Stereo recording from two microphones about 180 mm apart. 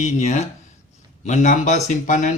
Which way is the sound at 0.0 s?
40° left (ahead or behind).